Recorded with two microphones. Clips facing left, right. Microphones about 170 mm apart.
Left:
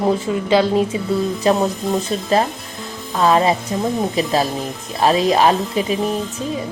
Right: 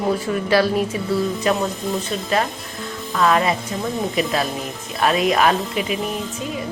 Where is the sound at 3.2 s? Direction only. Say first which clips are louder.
Left 3 dB; 30° left (ahead or behind).